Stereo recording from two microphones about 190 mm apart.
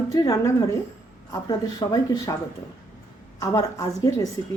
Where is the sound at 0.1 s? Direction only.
20° left (ahead or behind).